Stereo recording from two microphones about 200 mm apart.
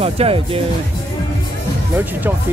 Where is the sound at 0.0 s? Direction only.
30° right (ahead or behind).